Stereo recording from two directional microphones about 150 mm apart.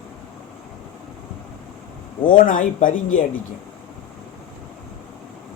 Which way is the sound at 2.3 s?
65° left (ahead or behind).